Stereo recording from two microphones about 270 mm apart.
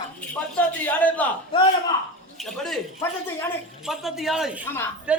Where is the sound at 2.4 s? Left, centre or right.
Centre.